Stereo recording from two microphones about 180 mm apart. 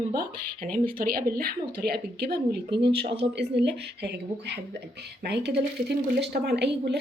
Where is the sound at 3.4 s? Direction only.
65° right (ahead or behind).